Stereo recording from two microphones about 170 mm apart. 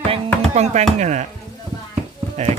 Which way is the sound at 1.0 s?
45° right (ahead or behind).